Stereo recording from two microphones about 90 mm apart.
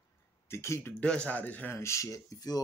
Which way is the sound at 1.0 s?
15° left (ahead or behind).